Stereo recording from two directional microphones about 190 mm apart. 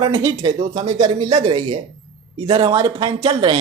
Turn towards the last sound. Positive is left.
turn(degrees=-25)  # may be behind; listen again after turning